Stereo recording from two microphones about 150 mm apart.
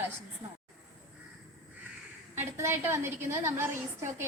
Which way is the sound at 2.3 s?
15° right (ahead or behind).